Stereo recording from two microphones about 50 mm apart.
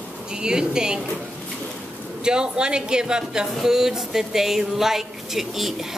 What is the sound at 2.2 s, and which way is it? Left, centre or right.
A woman's voice, centre.